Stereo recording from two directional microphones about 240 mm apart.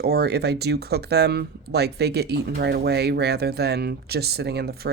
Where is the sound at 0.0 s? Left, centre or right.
Right.